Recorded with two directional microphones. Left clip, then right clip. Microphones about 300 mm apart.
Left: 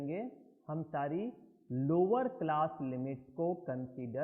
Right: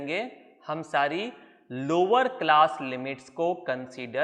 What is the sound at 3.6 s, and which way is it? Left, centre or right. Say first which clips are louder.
Speech: right 10 dB; centre.